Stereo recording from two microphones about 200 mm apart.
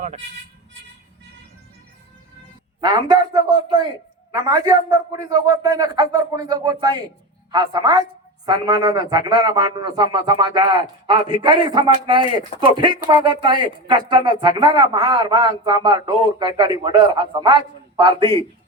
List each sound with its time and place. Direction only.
2.8 s a man's voice: 20° right (ahead or behind)